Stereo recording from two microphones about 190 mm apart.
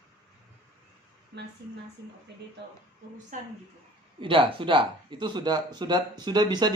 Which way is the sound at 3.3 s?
40° right (ahead or behind).